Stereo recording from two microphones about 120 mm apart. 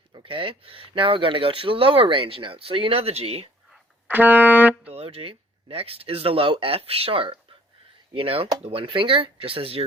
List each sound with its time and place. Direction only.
0.1 s speech: 45° right (ahead or behind)
4.1 s speech: 15° right (ahead or behind)
4.9 s speech: 55° right (ahead or behind)